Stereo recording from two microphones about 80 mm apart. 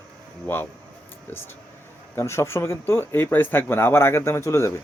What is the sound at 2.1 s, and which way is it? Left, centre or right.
Speech, left.